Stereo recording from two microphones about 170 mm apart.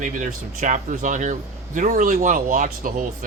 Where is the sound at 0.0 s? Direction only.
50° right (ahead or behind).